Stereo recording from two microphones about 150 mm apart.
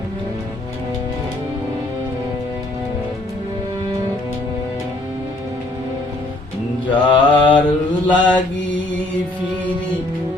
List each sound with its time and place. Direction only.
6.8 s mantra: 30° left (ahead or behind)
8.0 s mantra: 10° left (ahead or behind)